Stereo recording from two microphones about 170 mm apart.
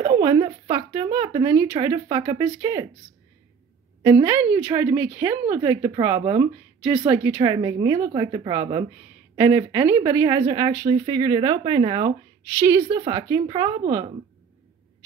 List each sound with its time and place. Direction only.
0.0 s speech: 20° right (ahead or behind)
4.2 s speech: 15° right (ahead or behind)
7.3 s speech: 25° right (ahead or behind)